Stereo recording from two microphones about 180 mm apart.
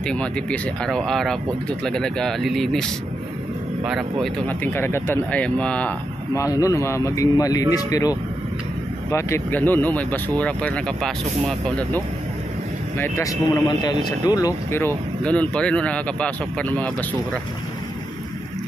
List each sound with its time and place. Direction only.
0.0 s speech: 5° left (ahead or behind)
4.5 s speech: 15° left (ahead or behind)